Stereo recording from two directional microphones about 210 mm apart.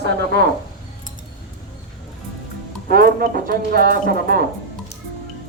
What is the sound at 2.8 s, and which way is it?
Speech, 45° right (ahead or behind).